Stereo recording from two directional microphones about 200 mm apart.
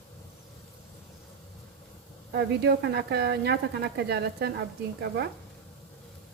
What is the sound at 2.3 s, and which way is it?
Speech, 55° right (ahead or behind).